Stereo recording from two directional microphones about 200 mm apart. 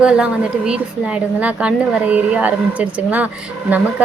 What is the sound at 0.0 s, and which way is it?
A woman's voice, 5° right (ahead or behind).